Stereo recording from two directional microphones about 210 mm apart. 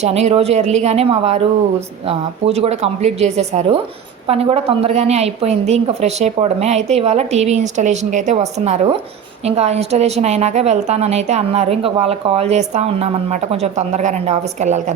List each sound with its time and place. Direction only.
0.0 s a woman's voice: 30° right (ahead or behind)